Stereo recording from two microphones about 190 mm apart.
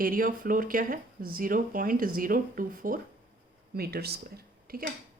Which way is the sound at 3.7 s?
55° right (ahead or behind).